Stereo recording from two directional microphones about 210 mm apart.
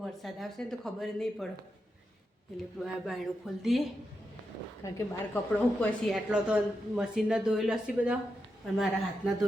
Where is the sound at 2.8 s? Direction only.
Centre (ahead or behind).